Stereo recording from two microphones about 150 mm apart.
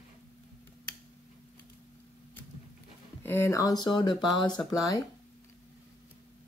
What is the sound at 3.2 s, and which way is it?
Speech, 15° left (ahead or behind).